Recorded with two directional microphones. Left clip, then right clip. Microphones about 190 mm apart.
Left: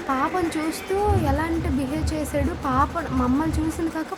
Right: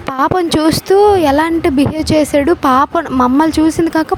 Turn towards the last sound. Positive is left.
turn(degrees=-50)  # may be behind; listen again after turning